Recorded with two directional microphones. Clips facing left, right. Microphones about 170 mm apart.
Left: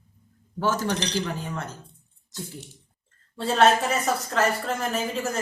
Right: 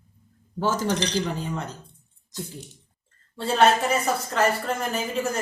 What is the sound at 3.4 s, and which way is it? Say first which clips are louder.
Speech: even; centre (ahead or behind).